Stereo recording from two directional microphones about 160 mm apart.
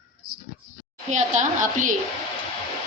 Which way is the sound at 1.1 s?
50° right (ahead or behind).